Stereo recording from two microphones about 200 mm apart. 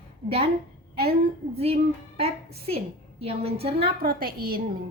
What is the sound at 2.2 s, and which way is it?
A woman's voice, 30° right (ahead or behind).